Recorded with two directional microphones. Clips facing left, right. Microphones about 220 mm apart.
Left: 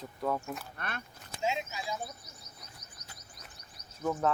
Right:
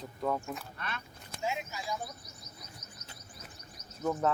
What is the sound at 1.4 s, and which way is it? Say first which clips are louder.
Speech: left 2 dB; 20° left (ahead or behind).